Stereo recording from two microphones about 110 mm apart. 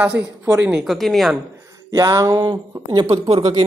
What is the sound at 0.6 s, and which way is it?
Speech, 10° right (ahead or behind).